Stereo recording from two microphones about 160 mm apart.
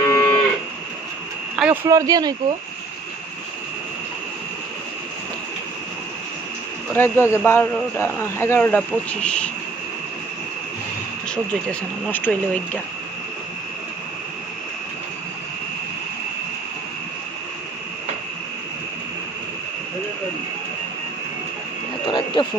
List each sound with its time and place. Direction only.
0.0 s cattle: 15° left (ahead or behind)
1.6 s speech: 10° right (ahead or behind)
1.9 s speech: 20° right (ahead or behind)
7.0 s speech: 15° left (ahead or behind)
12.1 s speech: 10° left (ahead or behind)
22.0 s a sound: 30° left (ahead or behind)